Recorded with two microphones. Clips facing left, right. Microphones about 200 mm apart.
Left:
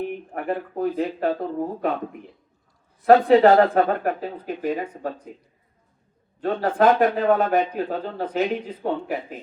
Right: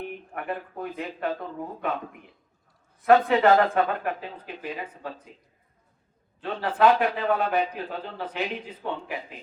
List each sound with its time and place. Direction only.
0.0 s speech: 35° left (ahead or behind)
3.1 s speech: 35° left (ahead or behind)
6.4 s a man's voice: 40° left (ahead or behind)